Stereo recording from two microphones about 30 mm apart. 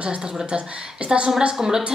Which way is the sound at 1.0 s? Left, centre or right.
Right.